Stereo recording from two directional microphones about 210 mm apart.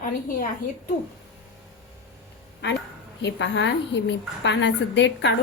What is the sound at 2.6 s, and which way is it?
A woman's voice, 55° left (ahead or behind).